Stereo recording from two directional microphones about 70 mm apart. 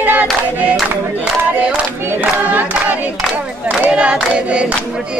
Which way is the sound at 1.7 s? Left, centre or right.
Right.